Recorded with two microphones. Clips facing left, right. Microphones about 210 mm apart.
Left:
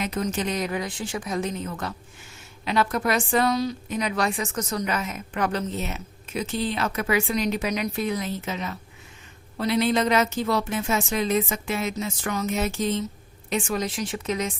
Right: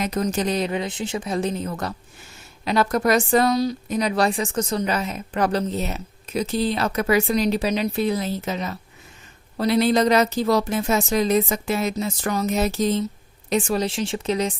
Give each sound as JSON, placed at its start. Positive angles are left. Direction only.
{"t": 0.0, "sound": "a woman's voice", "side_deg": -40}